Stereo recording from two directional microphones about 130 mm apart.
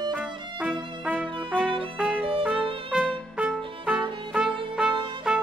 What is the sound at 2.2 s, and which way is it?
Music, 45° right (ahead or behind).